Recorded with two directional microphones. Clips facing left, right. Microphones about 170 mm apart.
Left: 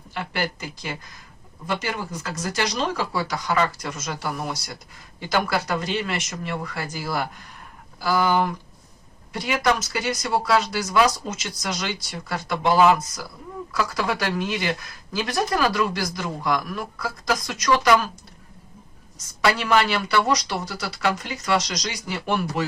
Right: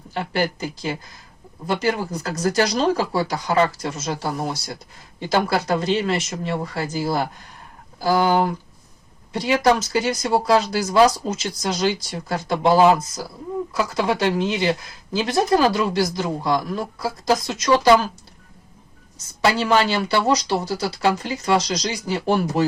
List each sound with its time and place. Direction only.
0.1 s speech: 40° right (ahead or behind)
19.4 s speech: 30° right (ahead or behind)